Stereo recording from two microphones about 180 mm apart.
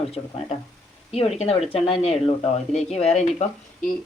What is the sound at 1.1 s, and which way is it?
Speech, 35° left (ahead or behind).